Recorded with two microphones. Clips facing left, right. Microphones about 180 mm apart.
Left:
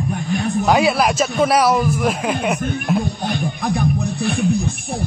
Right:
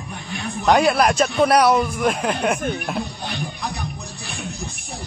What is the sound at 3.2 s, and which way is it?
Music, 50° left (ahead or behind).